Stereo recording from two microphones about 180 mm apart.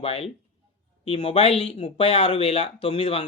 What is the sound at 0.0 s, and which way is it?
Speech, 35° left (ahead or behind).